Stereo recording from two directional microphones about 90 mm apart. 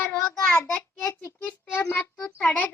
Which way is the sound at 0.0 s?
20° left (ahead or behind).